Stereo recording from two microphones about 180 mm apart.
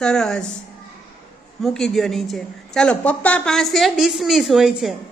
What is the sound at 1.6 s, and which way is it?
A woman's voice, centre (ahead or behind).